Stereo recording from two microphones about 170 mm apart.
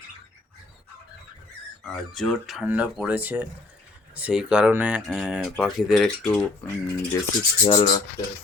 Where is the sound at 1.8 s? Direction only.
Centre (ahead or behind).